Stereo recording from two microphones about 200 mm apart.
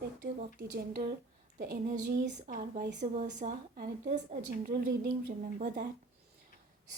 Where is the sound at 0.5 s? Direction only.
50° right (ahead or behind).